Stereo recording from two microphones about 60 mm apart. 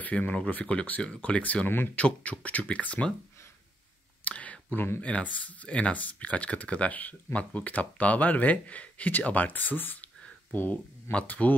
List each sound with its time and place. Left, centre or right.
0.0 s speech: left
4.2 s a sound: left
5.0 s speech: left
11.1 s speech: left